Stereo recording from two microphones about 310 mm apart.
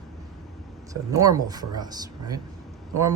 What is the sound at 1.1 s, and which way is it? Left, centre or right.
Speech, centre.